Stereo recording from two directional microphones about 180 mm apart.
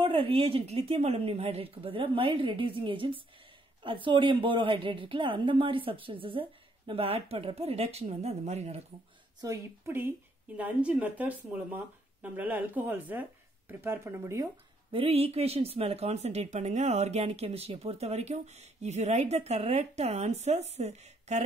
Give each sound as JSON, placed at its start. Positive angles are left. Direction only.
{"t": 0.0, "sound": "a woman's voice", "side_deg": -30}
{"t": 9.4, "sound": "speech", "side_deg": -15}
{"t": 14.9, "sound": "speech", "side_deg": -30}